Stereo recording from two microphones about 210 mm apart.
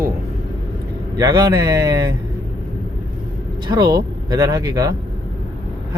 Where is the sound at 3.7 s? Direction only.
20° right (ahead or behind).